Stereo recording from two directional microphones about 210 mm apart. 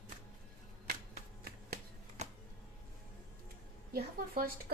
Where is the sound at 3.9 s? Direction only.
45° right (ahead or behind).